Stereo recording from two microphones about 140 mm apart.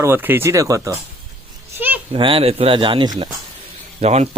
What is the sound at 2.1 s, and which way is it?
Speech, 40° right (ahead or behind).